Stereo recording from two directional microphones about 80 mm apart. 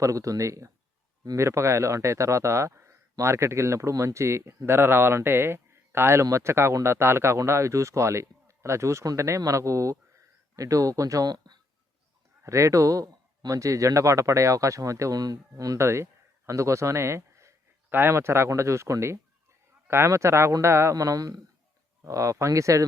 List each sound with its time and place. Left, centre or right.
0.0 s speech: right
12.4 s speech: right
15.8 s speech: right
20.9 s speech: right
22.0 s speech: right